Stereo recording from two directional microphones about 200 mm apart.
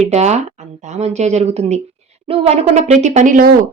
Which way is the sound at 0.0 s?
35° right (ahead or behind).